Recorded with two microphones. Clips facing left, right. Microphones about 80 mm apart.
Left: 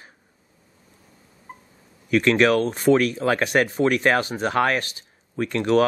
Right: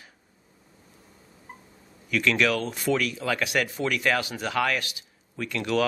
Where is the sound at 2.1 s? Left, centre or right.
Left.